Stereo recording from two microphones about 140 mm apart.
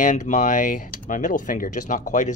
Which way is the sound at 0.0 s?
60° left (ahead or behind).